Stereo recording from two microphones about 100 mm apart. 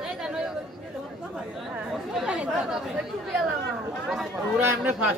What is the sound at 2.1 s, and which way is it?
Speech, 10° right (ahead or behind).